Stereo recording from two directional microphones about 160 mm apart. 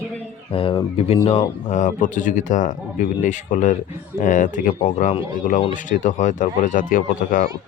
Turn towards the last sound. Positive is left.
turn(degrees=55)  # may be behind; listen again after turning